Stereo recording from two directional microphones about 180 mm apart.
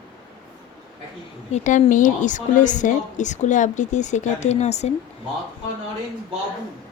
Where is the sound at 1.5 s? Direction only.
45° left (ahead or behind).